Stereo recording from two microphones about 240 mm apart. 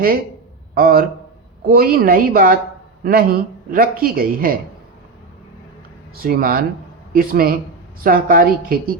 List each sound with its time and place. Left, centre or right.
0.7 s a man's voice: right
6.1 s speech: right